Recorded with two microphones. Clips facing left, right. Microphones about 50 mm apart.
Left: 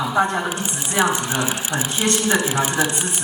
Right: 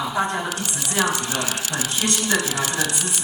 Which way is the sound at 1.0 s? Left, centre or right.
Left.